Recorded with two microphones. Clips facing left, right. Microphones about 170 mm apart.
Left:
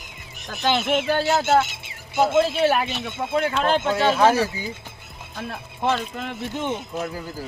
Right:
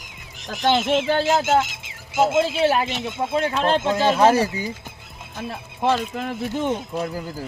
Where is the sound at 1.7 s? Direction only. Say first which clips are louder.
Even; 90° right.